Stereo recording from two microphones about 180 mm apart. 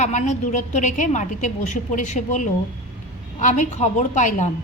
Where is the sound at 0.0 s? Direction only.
40° left (ahead or behind).